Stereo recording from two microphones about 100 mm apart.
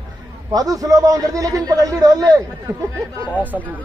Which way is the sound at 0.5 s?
35° right (ahead or behind).